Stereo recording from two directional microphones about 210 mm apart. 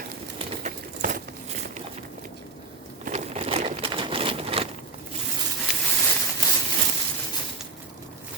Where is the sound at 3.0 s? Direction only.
35° right (ahead or behind).